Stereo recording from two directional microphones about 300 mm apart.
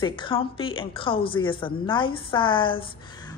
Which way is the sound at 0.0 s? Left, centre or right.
Centre.